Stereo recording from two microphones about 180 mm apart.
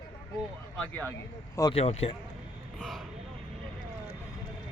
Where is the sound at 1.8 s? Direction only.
35° left (ahead or behind).